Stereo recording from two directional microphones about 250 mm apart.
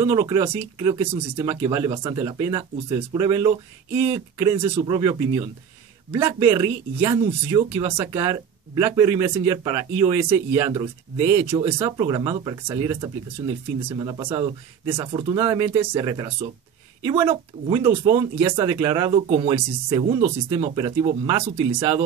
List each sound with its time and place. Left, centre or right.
0.0 s speech: centre
13.9 s speech: centre
21.7 s speech: centre